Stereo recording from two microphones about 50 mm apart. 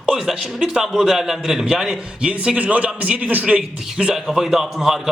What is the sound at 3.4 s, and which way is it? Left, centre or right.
Speech, centre.